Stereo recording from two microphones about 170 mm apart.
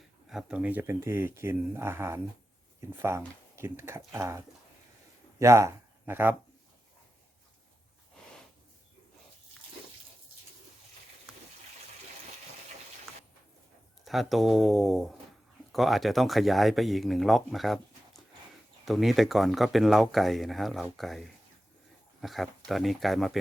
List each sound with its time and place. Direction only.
0.3 s speech: 5° right (ahead or behind)
14.0 s speech: centre (ahead or behind)
18.9 s speech: centre (ahead or behind)